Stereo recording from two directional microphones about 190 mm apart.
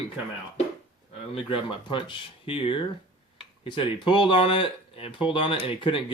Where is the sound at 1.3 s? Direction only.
25° left (ahead or behind).